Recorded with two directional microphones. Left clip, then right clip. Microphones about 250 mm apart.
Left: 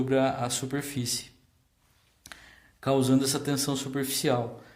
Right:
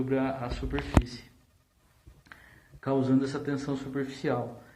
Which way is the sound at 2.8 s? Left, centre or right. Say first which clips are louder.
Left 3 dB; left.